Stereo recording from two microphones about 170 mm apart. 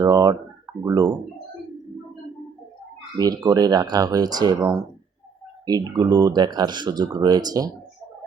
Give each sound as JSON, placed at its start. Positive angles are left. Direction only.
{"t": 0.0, "sound": "a sound", "side_deg": -20}
{"t": 0.9, "sound": "speech", "side_deg": -20}
{"t": 3.2, "sound": "speech", "side_deg": -20}